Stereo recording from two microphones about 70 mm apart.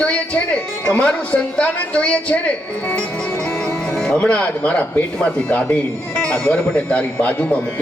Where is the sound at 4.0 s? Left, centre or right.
Centre.